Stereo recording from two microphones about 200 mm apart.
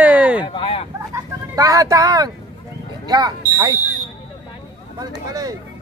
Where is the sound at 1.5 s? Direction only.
15° right (ahead or behind).